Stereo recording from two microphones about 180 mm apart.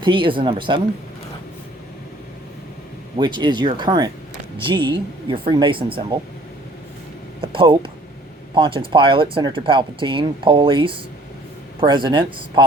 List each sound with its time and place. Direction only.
0.0 s speech: 30° right (ahead or behind)
3.2 s speech: 25° right (ahead or behind)
7.4 s speech: 30° right (ahead or behind)